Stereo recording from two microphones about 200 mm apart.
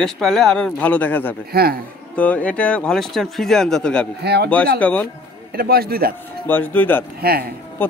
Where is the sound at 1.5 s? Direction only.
50° right (ahead or behind).